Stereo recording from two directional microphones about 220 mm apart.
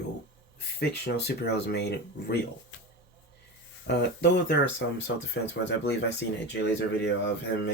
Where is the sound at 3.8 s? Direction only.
50° left (ahead or behind).